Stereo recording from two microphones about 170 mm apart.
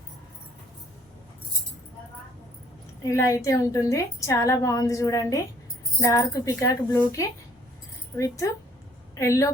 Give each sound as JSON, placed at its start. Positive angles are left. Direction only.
{"t": 3.1, "sound": "a woman's voice", "side_deg": 20}